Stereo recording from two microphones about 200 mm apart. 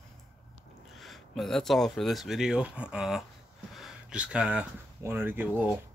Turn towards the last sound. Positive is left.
turn(degrees=-10)  # may be behind; listen again after turning